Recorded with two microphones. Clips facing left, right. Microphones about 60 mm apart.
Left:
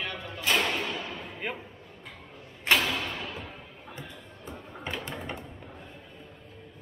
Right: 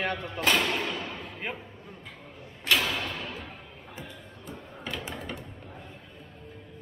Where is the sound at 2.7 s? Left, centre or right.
Centre.